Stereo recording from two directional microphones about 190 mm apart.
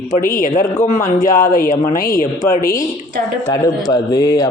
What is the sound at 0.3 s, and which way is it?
Speech, 45° left (ahead or behind).